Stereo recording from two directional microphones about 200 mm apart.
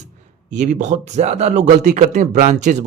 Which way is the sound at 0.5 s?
35° right (ahead or behind).